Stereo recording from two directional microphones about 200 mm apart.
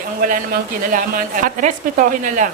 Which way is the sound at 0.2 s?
45° right (ahead or behind).